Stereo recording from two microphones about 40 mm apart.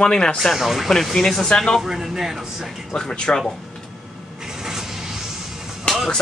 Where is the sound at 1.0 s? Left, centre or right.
Centre.